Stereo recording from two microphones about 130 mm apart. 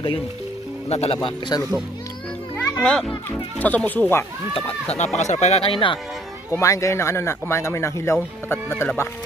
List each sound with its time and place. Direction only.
0.8 s speech: 50° left (ahead or behind)
1.5 s speech: 30° left (ahead or behind)
2.5 s children playing: 10° left (ahead or behind)
3.3 s speech: 10° left (ahead or behind)
4.6 s speech: 50° left (ahead or behind)
6.5 s speech: 25° left (ahead or behind)